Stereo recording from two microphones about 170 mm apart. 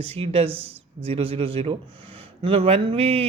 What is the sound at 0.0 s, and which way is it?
Speech, 35° right (ahead or behind).